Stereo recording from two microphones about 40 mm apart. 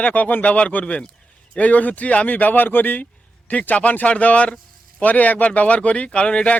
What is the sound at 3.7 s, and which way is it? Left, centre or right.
Speech, left.